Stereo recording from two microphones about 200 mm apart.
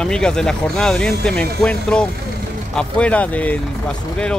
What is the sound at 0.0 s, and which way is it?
Speech, 5° left (ahead or behind).